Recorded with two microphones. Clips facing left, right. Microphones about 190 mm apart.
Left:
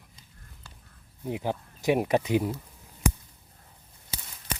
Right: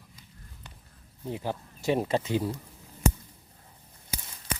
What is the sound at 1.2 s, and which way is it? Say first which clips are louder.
Speech: left 2 dB; 15° left (ahead or behind).